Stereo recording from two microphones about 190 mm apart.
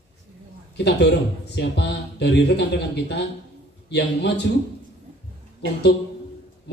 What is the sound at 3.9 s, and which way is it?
Speech, 65° left (ahead or behind).